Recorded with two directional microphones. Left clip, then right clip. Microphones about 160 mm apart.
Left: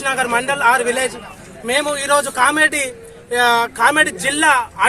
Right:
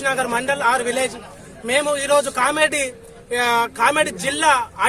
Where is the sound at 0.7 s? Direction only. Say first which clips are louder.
Left 4 dB; 35° right (ahead or behind).